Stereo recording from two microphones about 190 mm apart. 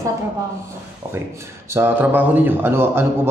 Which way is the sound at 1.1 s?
15° right (ahead or behind).